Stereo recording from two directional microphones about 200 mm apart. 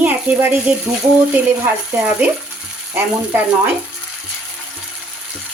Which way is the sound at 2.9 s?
10° right (ahead or behind).